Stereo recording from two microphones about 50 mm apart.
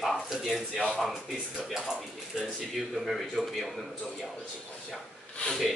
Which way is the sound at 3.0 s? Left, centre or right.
Centre.